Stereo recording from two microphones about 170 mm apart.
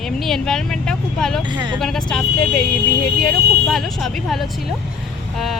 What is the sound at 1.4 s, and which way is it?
Speech, 25° right (ahead or behind).